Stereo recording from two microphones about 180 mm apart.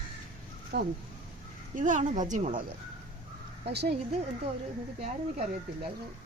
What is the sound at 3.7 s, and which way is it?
Speech, 65° right (ahead or behind).